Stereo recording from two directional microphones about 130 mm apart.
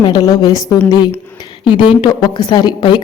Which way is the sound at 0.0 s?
30° left (ahead or behind).